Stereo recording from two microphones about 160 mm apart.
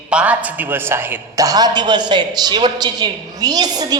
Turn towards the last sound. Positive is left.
turn(degrees=-25)  # may be behind; listen again after turning